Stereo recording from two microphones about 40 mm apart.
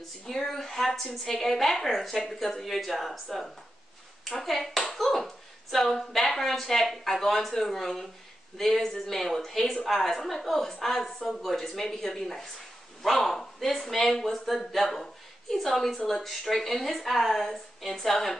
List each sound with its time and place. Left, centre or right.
0.3 s a woman's voice: centre